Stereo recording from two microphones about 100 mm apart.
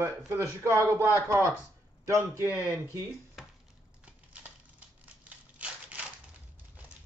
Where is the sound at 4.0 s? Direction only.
10° right (ahead or behind).